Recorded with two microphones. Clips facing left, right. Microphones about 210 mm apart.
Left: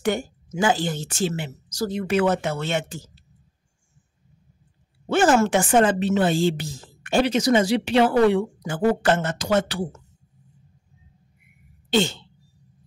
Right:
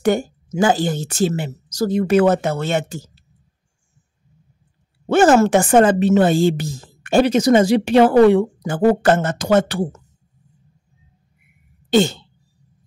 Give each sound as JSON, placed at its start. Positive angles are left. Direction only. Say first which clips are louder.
{"t": 0.0, "sound": "speech", "louder": "right 6 dB", "side_deg": -40}
{"t": 5.0, "sound": "speech", "louder": "right 5 dB", "side_deg": -45}
{"t": 11.9, "sound": "speech", "louder": "right 6 dB", "side_deg": -40}